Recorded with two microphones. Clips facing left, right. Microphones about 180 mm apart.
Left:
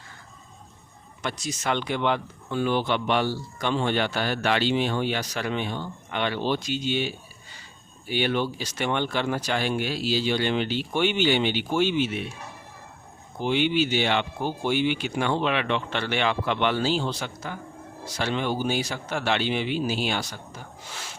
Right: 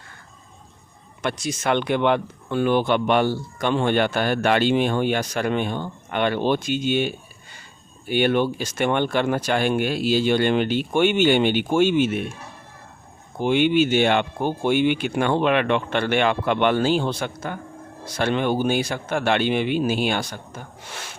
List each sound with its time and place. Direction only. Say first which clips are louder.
1.2 s speech: right 5 dB; 55° right (ahead or behind)
13.4 s speech: right 5 dB; 55° right (ahead or behind)